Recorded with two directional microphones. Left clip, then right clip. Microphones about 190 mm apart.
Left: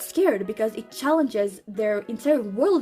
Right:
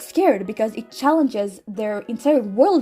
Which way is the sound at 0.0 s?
20° right (ahead or behind).